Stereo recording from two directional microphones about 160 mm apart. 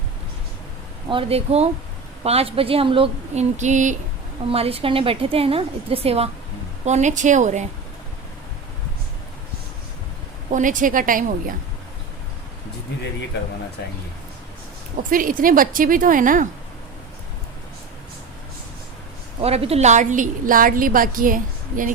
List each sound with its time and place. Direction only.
1.1 s a woman's voice: 40° right (ahead or behind)
3.6 s a woman's voice: 50° right (ahead or behind)
4.4 s a woman's voice: 40° right (ahead or behind)
10.5 s a woman's voice: 55° right (ahead or behind)
15.1 s a woman's voice: 60° right (ahead or behind)
19.4 s a woman's voice: 40° right (ahead or behind); by 21.9 s 55° right (ahead or behind)